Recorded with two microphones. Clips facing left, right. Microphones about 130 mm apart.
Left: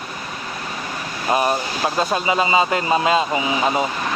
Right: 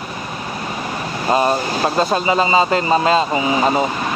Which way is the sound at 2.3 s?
5° left (ahead or behind).